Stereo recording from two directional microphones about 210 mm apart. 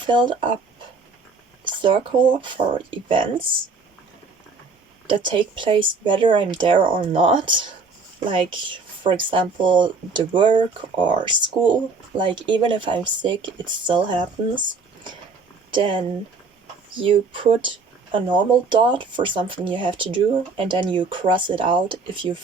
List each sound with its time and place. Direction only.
0.0 s speech: 20° right (ahead or behind)
1.6 s speech: 25° right (ahead or behind)
5.0 s speech: 25° right (ahead or behind)
15.7 s speech: 25° right (ahead or behind)